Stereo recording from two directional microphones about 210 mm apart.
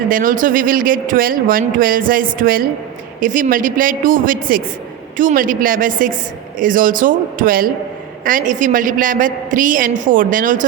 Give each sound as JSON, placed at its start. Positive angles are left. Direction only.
{"t": 0.1, "sound": "speech", "side_deg": -40}